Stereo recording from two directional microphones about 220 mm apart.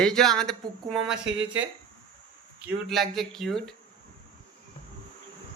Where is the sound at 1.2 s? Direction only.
55° right (ahead or behind).